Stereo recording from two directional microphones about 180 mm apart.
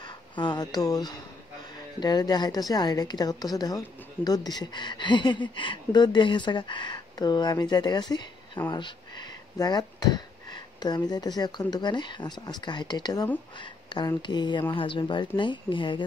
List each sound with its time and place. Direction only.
0.4 s speech: 25° left (ahead or behind)